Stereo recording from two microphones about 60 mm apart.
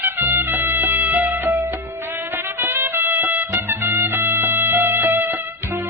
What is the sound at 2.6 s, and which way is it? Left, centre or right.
Music, right.